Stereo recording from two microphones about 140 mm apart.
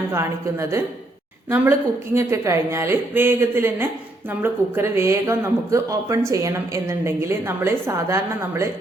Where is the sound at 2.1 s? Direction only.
20° right (ahead or behind).